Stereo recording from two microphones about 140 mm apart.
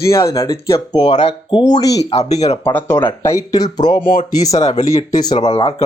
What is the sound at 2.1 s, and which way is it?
Speech, 50° left (ahead or behind).